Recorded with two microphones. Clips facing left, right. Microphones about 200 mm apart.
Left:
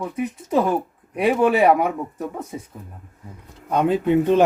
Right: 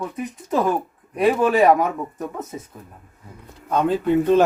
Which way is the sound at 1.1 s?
10° left (ahead or behind).